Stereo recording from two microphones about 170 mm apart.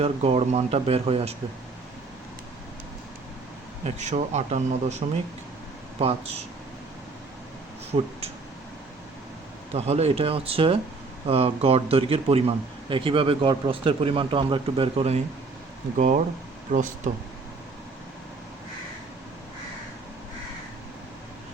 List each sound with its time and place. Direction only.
0.0 s speech: 35° right (ahead or behind)
3.8 s speech: 40° right (ahead or behind)
7.9 s speech: 35° right (ahead or behind)
9.7 s speech: 40° right (ahead or behind)
16.0 s speech: 45° right (ahead or behind)